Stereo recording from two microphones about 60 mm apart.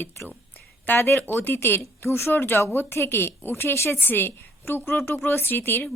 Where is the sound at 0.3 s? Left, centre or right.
Left.